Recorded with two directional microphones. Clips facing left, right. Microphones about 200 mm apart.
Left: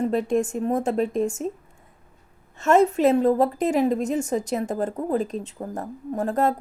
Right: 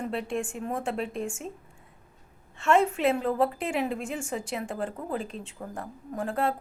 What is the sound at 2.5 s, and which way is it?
A woman's voice, 40° left (ahead or behind).